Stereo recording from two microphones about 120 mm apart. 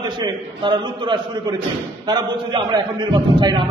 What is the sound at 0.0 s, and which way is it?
A man's voice, 40° right (ahead or behind).